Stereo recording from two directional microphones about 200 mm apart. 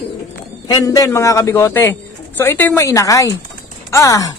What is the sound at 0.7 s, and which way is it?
Speech, 20° left (ahead or behind).